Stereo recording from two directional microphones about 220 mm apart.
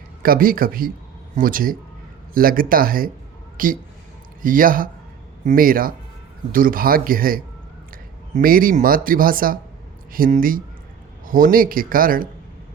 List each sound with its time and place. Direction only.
0.2 s speech: 40° right (ahead or behind)